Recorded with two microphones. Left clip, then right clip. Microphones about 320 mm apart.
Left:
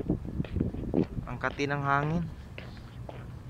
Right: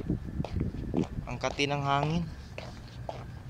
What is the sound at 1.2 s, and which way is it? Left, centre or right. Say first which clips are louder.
A man's voice: right 1 dB; centre.